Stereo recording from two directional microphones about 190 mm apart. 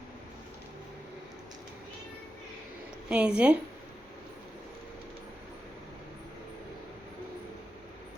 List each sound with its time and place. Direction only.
3.1 s a woman's voice: 5° right (ahead or behind)